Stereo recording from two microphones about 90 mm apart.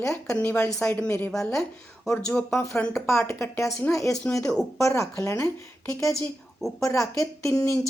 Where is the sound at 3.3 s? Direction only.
30° left (ahead or behind).